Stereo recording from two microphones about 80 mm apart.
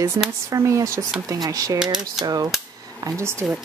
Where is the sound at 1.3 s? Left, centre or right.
Right.